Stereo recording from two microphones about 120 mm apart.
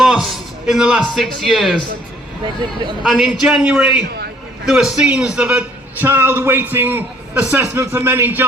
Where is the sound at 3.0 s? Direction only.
Centre (ahead or behind).